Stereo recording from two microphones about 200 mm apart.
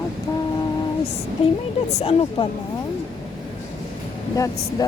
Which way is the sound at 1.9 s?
30° left (ahead or behind).